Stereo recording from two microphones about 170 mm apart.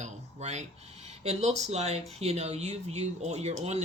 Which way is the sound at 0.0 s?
45° right (ahead or behind).